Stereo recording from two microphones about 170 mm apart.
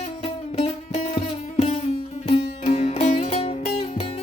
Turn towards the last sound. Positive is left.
turn(degrees=35)  # may be behind; listen again after turning